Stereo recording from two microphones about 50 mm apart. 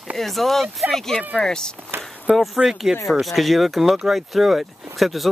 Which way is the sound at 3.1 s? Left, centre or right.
Centre.